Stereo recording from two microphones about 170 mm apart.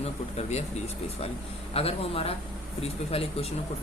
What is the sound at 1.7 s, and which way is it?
A man's voice, 35° left (ahead or behind).